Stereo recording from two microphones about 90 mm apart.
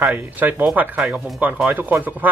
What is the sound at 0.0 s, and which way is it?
Speech, 20° right (ahead or behind).